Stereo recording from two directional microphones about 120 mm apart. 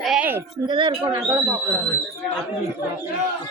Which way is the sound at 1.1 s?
20° right (ahead or behind).